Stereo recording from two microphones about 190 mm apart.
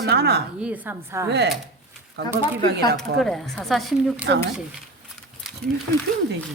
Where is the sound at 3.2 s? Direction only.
Centre (ahead or behind).